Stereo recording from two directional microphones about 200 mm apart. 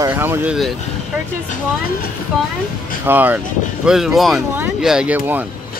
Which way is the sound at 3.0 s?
10° right (ahead or behind).